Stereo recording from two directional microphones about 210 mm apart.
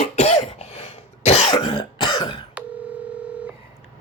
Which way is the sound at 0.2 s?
30° left (ahead or behind).